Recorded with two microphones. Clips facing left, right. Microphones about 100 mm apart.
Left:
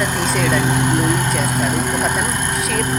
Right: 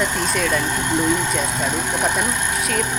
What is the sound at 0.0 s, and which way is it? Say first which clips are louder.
Speech: left 2 dB; 5° left (ahead or behind).